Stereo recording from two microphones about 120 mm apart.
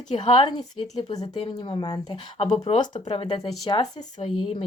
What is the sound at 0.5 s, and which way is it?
Speech, 35° left (ahead or behind).